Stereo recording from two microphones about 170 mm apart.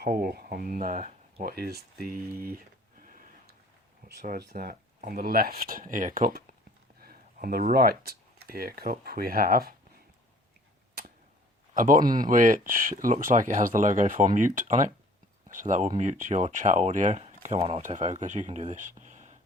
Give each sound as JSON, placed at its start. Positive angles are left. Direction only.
{"t": 0.0, "sound": "speech", "side_deg": -65}
{"t": 1.5, "sound": "speech", "side_deg": -65}
{"t": 3.0, "sound": "a sound", "side_deg": -55}
{"t": 4.1, "sound": "speech", "side_deg": -60}
{"t": 11.7, "sound": "speech", "side_deg": -55}